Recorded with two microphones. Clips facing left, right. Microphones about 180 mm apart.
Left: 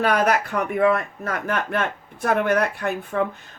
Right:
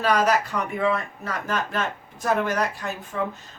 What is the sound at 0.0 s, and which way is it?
Speech, 60° left (ahead or behind).